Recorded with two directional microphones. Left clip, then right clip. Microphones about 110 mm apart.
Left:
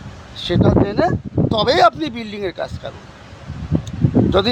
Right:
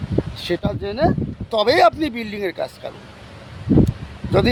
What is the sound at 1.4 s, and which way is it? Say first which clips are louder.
Speech: left 1 dB; 15° right (ahead or behind).